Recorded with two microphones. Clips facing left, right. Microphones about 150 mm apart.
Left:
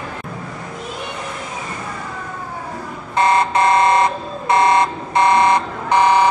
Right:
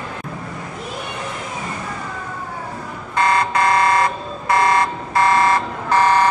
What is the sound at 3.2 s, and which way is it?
Buzzer, 25° left (ahead or behind).